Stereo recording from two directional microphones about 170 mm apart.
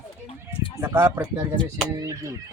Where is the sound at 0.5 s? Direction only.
30° left (ahead or behind).